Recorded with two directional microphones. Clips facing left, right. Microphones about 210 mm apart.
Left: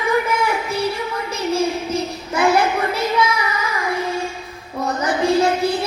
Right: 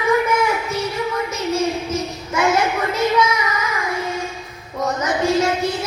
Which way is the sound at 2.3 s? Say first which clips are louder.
Left 2 dB; 30° left (ahead or behind).